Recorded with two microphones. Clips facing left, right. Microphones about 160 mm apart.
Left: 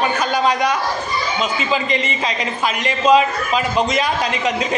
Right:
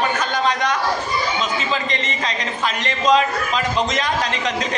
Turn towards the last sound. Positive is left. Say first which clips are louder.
# left 3 dB
turn(degrees=10)  # may be behind; listen again after turning